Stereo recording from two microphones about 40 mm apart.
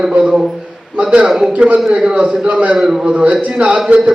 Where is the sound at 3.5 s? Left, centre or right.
Right.